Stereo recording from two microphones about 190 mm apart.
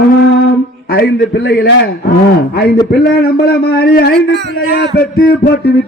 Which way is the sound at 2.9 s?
55° left (ahead or behind).